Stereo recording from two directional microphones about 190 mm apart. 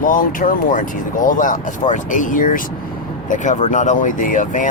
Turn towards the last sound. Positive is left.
turn(degrees=45)  # may be behind; listen again after turning